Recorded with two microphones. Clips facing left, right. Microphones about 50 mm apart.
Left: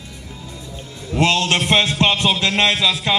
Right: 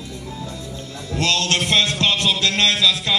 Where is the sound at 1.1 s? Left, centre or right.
Left.